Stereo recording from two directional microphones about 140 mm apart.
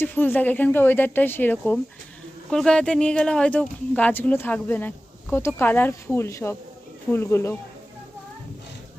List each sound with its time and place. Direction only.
0.0 s speech: 15° left (ahead or behind)